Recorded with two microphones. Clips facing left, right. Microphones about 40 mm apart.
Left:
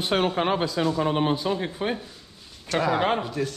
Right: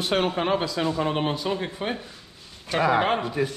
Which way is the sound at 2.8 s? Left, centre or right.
Centre.